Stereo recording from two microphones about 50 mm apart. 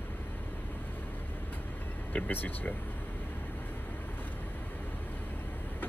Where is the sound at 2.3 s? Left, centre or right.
Left.